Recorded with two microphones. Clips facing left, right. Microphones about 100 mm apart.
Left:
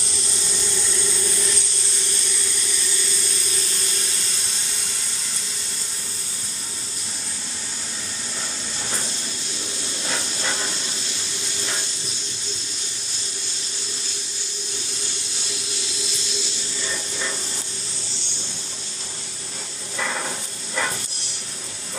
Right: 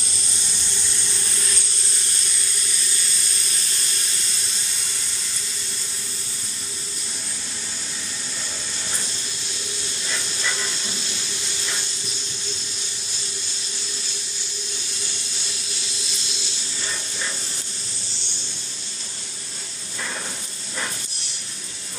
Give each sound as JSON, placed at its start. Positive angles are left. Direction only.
{"t": 10.0, "sound": "steam", "side_deg": 45}